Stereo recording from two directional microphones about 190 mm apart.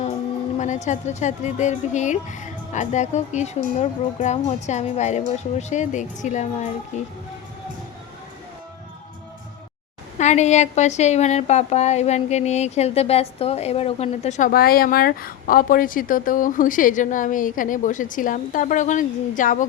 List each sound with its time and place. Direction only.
0.6 s a woman's voice: 40° left (ahead or behind)
10.2 s a woman's voice: 35° left (ahead or behind)